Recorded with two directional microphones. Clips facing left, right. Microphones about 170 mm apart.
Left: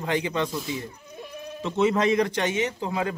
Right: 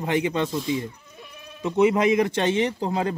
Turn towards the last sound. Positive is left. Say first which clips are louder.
# right 3 dB
turn(degrees=-35)  # may be behind; listen again after turning